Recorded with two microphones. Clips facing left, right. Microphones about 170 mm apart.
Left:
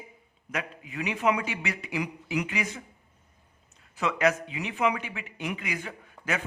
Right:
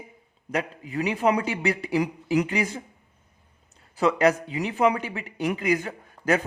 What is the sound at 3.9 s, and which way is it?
Speech, 35° right (ahead or behind).